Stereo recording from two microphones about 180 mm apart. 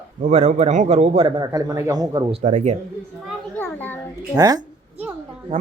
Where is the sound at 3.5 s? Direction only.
10° left (ahead or behind).